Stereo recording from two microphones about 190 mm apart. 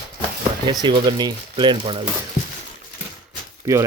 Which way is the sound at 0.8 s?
25° right (ahead or behind).